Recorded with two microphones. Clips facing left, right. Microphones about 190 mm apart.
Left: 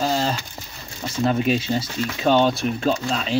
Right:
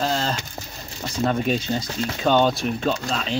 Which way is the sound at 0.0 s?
10° left (ahead or behind).